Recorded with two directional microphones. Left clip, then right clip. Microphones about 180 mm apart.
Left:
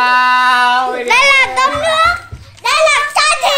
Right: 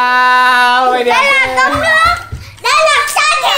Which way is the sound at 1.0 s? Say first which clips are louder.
Even; 60° left (ahead or behind).